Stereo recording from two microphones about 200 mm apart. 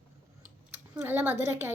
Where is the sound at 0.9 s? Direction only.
10° right (ahead or behind).